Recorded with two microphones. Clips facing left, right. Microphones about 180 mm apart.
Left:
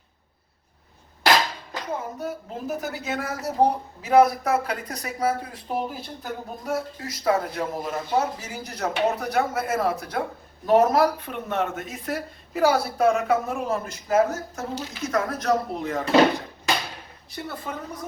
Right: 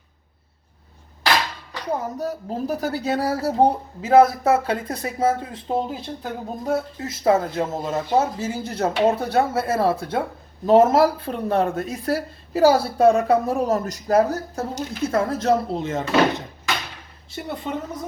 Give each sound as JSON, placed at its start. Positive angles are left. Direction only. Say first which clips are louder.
{"t": 1.9, "sound": "speech", "louder": "right 5 dB", "side_deg": -40}